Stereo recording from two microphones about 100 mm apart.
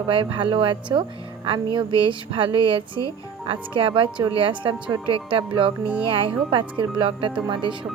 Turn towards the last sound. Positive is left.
turn(degrees=-55)  # may be behind; listen again after turning